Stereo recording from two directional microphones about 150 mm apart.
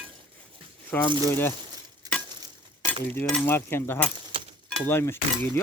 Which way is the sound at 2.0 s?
25° right (ahead or behind).